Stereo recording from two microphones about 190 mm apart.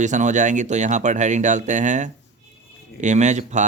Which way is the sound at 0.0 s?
40° right (ahead or behind).